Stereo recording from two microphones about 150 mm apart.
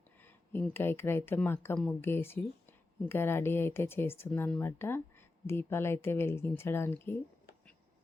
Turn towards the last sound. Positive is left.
turn(degrees=15)  # may be behind; listen again after turning